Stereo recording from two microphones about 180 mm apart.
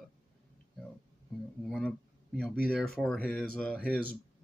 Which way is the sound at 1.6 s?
5° left (ahead or behind).